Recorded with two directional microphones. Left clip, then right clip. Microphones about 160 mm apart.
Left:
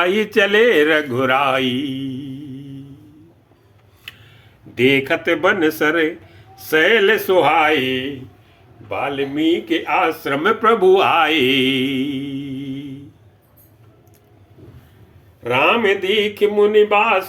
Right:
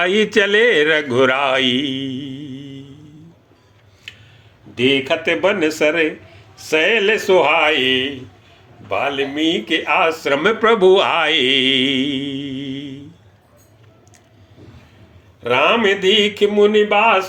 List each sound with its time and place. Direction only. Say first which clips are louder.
0.0 s speech: right 1 dB; 15° right (ahead or behind)
4.1 s a sound: even; 15° left (ahead or behind)
4.7 s a man's voice: left 1 dB; 15° left (ahead or behind); by 13.0 s 15° right (ahead or behind)
15.4 s speech: right 1 dB; 20° right (ahead or behind)